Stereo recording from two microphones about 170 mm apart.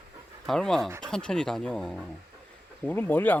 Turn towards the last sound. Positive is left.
turn(degrees=10)  # may be behind; listen again after turning